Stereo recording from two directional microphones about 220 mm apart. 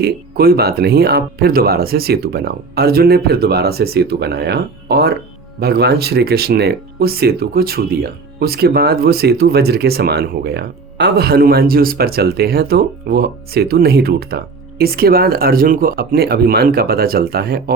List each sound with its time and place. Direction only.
0.0 s speech: 45° right (ahead or behind)